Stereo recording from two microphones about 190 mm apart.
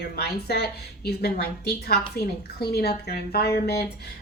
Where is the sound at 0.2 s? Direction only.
55° left (ahead or behind).